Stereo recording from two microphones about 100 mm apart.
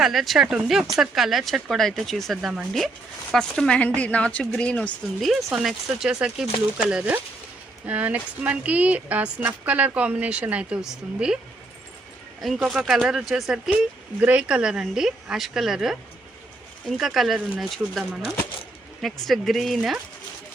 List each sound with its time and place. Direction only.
0.0 s speech: centre (ahead or behind)
5.2 s speech: centre (ahead or behind)
12.4 s speech: centre (ahead or behind)
17.0 s speech: centre (ahead or behind)
19.2 s speech: centre (ahead or behind)